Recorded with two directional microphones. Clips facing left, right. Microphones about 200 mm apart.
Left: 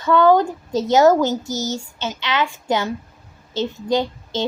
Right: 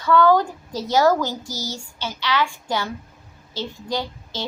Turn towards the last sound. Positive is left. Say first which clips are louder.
# left 7 dB
turn(degrees=20)  # may be behind; listen again after turning